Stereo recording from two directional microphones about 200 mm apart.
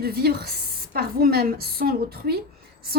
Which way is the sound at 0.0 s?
50° right (ahead or behind).